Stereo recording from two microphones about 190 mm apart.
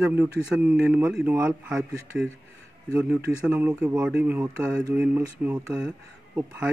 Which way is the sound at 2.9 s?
5° right (ahead or behind).